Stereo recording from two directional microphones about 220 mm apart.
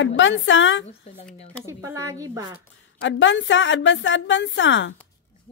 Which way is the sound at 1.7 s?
10° right (ahead or behind).